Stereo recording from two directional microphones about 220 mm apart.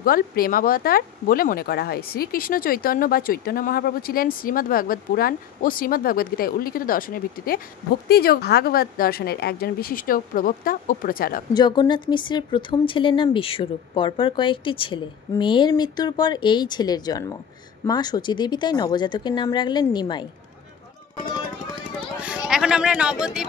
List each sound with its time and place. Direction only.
0.0 s a woman's voice: 40° left (ahead or behind)
11.5 s a woman's voice: 20° left (ahead or behind)
22.2 s speech: 5° right (ahead or behind)